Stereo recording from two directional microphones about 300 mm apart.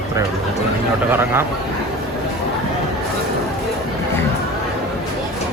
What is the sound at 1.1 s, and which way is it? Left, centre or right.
Speech, centre.